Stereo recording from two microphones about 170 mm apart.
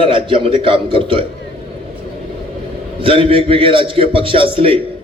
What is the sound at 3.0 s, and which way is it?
A man's voice, 35° right (ahead or behind).